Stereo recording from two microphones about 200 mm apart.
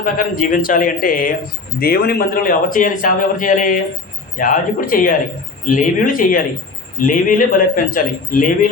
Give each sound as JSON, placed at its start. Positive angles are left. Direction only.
{"t": 0.0, "sound": "a man's voice", "side_deg": 40}